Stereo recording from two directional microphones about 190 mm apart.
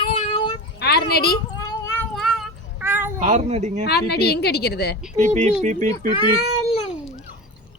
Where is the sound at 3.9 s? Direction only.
60° left (ahead or behind).